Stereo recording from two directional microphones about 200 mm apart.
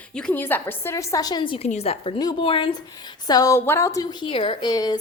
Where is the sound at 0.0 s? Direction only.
5° left (ahead or behind).